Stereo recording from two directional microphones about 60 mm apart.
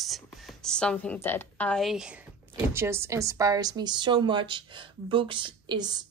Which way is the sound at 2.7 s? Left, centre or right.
Right.